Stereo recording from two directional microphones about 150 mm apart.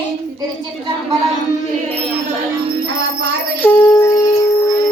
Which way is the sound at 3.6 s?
15° left (ahead or behind).